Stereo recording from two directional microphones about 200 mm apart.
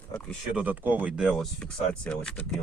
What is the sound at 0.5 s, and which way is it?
Speech, 10° right (ahead or behind).